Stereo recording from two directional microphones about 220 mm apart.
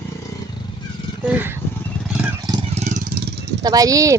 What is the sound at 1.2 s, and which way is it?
Speech, 10° right (ahead or behind).